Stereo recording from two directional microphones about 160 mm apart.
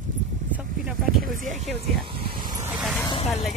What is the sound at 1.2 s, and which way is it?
Speech, 55° right (ahead or behind).